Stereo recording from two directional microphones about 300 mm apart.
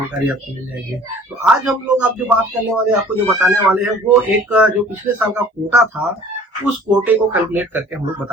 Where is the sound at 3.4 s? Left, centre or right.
Centre.